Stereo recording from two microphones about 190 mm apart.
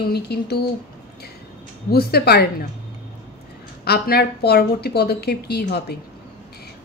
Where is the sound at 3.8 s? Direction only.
55° left (ahead or behind).